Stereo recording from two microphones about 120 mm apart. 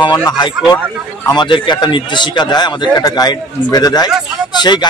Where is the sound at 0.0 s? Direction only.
35° left (ahead or behind).